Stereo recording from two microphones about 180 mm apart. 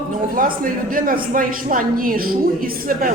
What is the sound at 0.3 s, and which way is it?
A man's voice, 50° right (ahead or behind).